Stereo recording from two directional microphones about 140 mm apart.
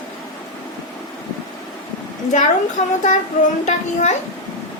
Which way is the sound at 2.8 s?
55° left (ahead or behind).